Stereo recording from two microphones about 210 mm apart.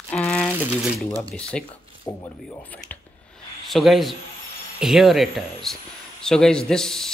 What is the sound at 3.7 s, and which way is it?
A man's voice, centre (ahead or behind).